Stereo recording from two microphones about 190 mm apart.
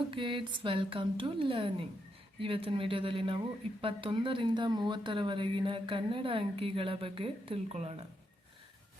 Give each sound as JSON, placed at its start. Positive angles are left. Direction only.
{"t": 0.1, "sound": "speech", "side_deg": -25}